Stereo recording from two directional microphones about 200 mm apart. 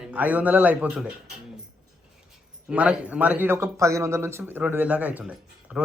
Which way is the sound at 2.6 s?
5° right (ahead or behind).